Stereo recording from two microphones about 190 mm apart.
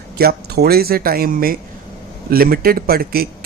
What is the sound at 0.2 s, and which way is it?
Speech, 55° right (ahead or behind).